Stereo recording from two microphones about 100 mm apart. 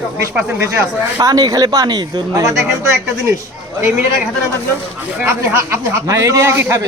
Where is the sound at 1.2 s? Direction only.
40° right (ahead or behind).